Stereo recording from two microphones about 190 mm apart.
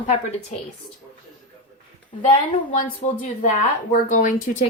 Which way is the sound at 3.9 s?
40° left (ahead or behind).